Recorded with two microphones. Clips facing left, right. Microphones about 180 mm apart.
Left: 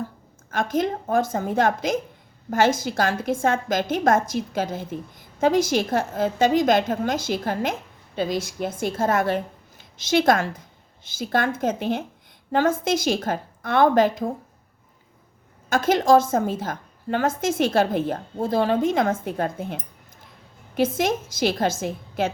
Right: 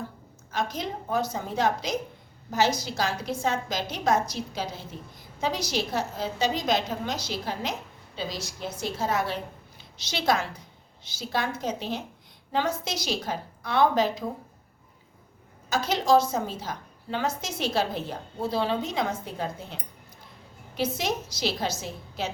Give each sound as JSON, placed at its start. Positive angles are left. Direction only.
{"t": 0.5, "sound": "a woman's voice", "side_deg": 50}
{"t": 15.7, "sound": "a woman's voice", "side_deg": 50}